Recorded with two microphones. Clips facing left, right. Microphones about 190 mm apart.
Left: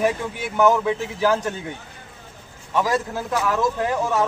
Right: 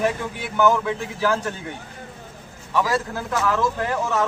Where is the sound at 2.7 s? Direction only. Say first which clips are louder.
Left 1 dB; 20° left (ahead or behind).